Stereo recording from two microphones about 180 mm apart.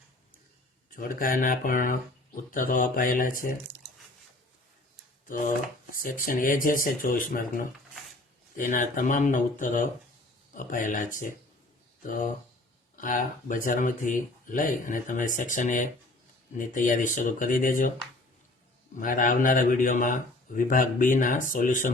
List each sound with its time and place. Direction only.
0.9 s speech: 50° left (ahead or behind)
5.9 s speech: 50° left (ahead or behind)
18.9 s speech: 50° left (ahead or behind)